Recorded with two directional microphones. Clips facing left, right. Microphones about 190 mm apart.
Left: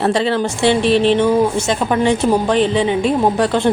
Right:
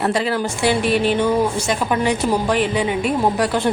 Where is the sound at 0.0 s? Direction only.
25° left (ahead or behind).